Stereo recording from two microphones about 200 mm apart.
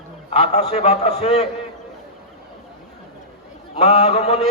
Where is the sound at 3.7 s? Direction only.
35° left (ahead or behind).